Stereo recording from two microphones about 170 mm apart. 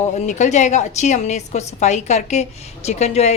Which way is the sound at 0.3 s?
45° left (ahead or behind).